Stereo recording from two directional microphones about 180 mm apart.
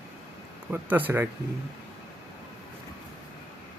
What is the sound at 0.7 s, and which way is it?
Speech, 10° right (ahead or behind).